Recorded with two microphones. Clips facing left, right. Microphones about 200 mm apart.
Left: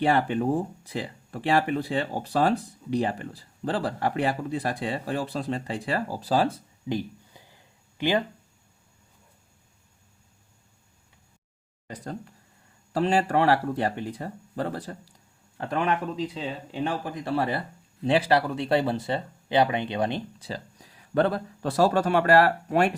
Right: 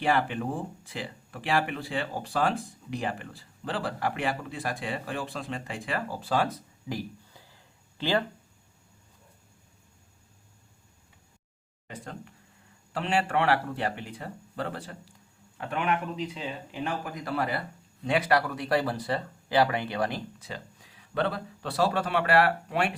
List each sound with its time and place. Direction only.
0.0 s speech: 35° left (ahead or behind); by 8.2 s 15° left (ahead or behind)
11.9 s speech: 40° left (ahead or behind)